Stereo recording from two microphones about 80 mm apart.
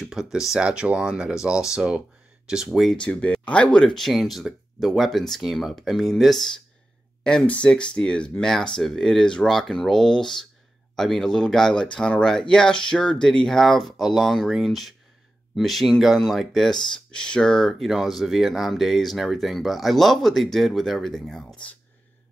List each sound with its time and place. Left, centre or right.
0.0 s speech: centre
3.0 s speech: centre